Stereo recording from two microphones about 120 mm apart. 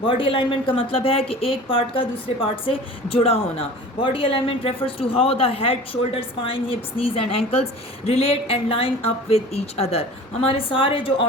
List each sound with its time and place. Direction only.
0.0 s speech: 45° left (ahead or behind)
10.4 s speech: 50° left (ahead or behind)